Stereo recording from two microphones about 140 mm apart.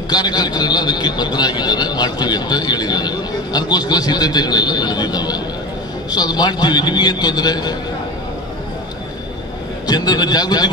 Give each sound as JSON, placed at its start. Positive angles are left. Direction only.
{"t": 0.1, "sound": "a man's voice", "side_deg": 30}
{"t": 9.8, "sound": "a man's voice", "side_deg": 30}